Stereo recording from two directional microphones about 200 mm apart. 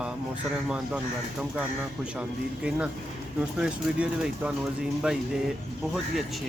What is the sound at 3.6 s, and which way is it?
Speech, 5° right (ahead or behind).